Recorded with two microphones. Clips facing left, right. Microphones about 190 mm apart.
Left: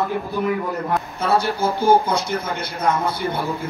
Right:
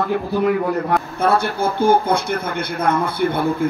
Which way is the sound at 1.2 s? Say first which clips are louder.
Right 1 dB; 55° right (ahead or behind).